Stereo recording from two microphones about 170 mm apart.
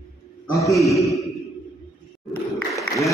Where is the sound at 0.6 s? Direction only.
Centre (ahead or behind).